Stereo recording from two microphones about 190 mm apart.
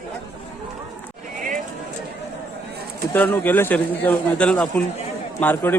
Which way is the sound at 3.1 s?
10° left (ahead or behind).